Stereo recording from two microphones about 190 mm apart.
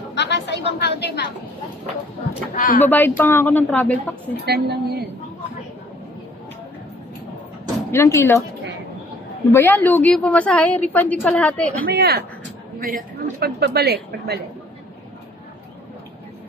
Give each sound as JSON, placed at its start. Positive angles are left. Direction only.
{"t": 0.1, "sound": "a sound", "side_deg": 65}
{"t": 2.5, "sound": "speech", "side_deg": 45}
{"t": 2.8, "sound": "a woman's voice", "side_deg": 10}
{"t": 4.5, "sound": "a woman's voice", "side_deg": -55}
{"t": 7.9, "sound": "a woman's voice", "side_deg": 15}
{"t": 9.5, "sound": "a woman's voice", "side_deg": 10}
{"t": 11.8, "sound": "a woman's voice", "side_deg": -55}